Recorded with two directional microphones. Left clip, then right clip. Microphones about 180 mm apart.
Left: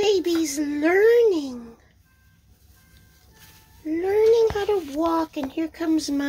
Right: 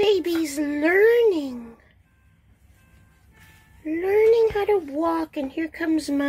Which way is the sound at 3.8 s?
15° right (ahead or behind).